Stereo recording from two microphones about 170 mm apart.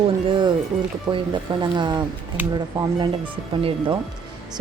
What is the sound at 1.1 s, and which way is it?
Speech, 25° right (ahead or behind).